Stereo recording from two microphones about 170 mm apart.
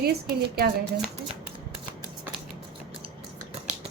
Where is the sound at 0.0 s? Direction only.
65° right (ahead or behind).